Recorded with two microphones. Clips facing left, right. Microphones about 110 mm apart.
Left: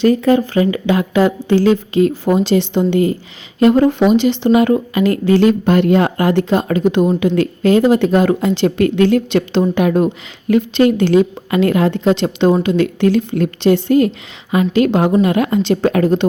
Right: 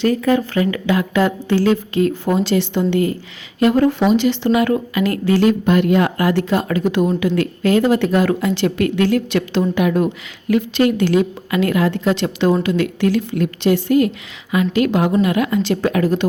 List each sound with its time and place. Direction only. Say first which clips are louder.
0.0 s a woman's voice: left 4 dB; 25° left (ahead or behind)